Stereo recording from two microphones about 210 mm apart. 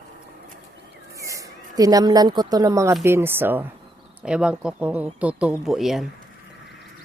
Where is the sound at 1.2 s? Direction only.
15° right (ahead or behind).